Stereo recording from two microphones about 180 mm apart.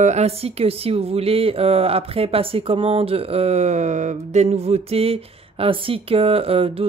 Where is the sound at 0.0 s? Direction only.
40° right (ahead or behind).